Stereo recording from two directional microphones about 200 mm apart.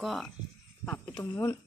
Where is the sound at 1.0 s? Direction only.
15° left (ahead or behind).